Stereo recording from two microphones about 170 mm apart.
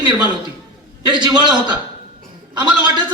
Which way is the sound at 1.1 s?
25° right (ahead or behind).